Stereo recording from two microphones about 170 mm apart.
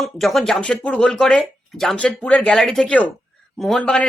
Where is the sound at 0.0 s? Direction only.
Centre (ahead or behind).